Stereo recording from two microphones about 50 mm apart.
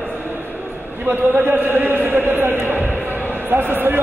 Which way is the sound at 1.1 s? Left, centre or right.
Right.